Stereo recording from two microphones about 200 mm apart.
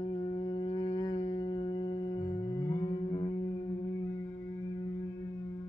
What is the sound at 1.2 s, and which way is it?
Music, 20° left (ahead or behind).